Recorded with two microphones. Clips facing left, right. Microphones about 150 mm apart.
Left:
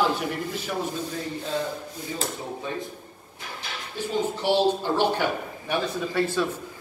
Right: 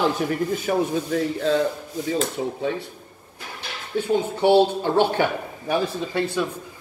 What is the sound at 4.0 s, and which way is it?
A man's voice, 55° right (ahead or behind).